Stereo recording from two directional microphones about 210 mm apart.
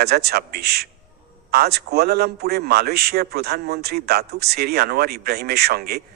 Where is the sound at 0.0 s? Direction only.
50° right (ahead or behind).